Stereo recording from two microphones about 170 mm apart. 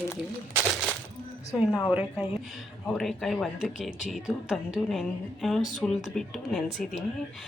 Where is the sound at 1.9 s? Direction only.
5° right (ahead or behind).